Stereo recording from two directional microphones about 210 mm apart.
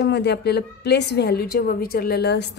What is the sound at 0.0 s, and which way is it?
A woman's voice, 55° left (ahead or behind).